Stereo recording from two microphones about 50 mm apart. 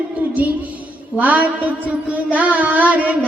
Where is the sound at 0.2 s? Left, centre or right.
Right.